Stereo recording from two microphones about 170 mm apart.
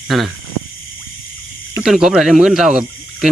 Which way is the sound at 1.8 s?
Centre (ahead or behind).